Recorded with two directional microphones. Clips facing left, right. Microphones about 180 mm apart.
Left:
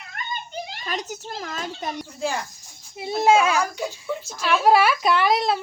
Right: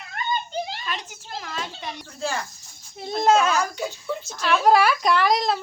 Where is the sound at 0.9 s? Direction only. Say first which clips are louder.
Left 3 dB; 40° left (ahead or behind).